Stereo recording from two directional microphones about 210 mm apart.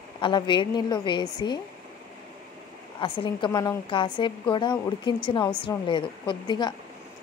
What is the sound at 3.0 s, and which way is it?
A woman's voice, 25° left (ahead or behind).